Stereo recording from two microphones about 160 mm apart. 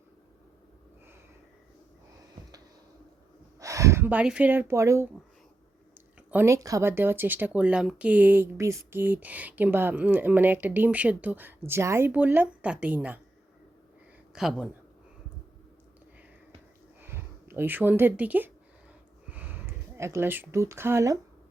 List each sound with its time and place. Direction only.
3.6 s speech: 20° right (ahead or behind)
6.3 s speech: 15° right (ahead or behind)
14.3 s speech: 5° right (ahead or behind)
17.0 s speech: 15° right (ahead or behind)